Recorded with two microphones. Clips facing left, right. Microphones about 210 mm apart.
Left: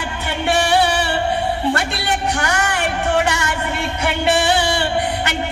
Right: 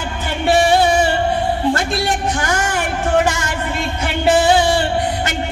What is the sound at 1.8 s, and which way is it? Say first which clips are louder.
Speech: right 3 dB; 70° left (ahead or behind).